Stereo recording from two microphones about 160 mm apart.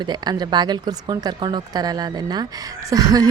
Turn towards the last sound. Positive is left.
turn(degrees=-20)  # may be behind; listen again after turning